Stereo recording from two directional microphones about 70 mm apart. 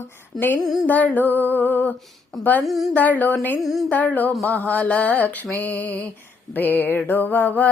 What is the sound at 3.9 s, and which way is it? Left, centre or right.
Mantra, left.